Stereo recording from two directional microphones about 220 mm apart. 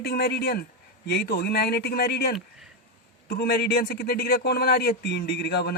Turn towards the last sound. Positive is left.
turn(degrees=45)  # may be behind; listen again after turning